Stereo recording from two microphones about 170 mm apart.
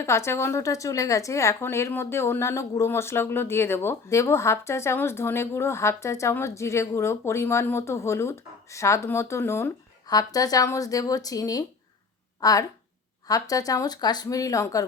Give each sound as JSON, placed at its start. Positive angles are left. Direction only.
{"t": 0.0, "sound": "speech", "side_deg": 15}